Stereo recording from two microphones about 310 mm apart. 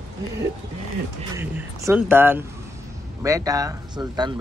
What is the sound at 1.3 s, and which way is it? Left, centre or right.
Speech, centre.